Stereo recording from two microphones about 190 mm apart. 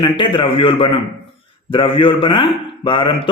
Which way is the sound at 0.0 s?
25° left (ahead or behind).